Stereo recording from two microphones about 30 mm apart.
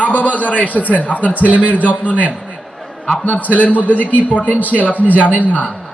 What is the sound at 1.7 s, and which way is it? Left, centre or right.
Speech, left.